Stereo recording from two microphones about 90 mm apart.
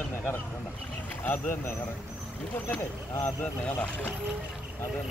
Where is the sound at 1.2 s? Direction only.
20° left (ahead or behind).